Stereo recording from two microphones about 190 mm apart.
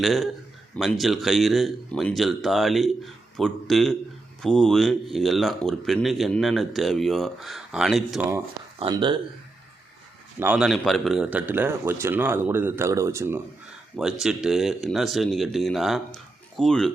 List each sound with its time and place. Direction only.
0.0 s speech: centre (ahead or behind)
8.8 s speech: 25° right (ahead or behind)
10.4 s a man's voice: 5° right (ahead or behind)
13.9 s speech: centre (ahead or behind)